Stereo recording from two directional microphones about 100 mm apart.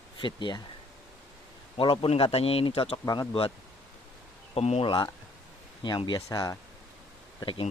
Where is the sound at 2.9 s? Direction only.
40° left (ahead or behind).